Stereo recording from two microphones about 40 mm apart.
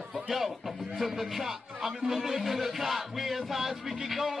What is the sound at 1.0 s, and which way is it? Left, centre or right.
Speech, centre.